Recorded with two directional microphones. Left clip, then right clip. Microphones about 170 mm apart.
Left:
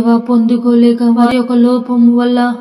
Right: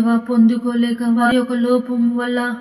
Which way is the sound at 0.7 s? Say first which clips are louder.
Left 9 dB; 30° left (ahead or behind).